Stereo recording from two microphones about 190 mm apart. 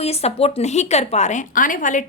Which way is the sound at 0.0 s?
35° left (ahead or behind).